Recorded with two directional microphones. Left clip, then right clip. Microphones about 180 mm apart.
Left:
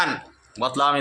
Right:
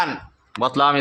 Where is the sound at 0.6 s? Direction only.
50° right (ahead or behind).